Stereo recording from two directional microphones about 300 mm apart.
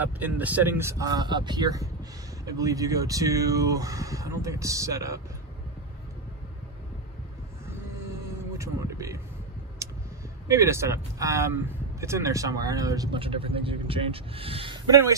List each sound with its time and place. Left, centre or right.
0.0 s speech: centre
8.5 s a sound: centre
10.5 s speech: centre